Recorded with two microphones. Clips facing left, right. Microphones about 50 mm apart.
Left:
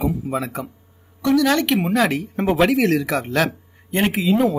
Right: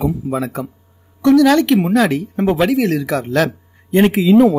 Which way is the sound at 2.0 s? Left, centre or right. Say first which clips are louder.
Right 4 dB; left.